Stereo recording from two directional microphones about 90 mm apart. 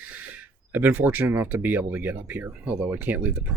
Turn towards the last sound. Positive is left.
turn(degrees=-20)  # may be behind; listen again after turning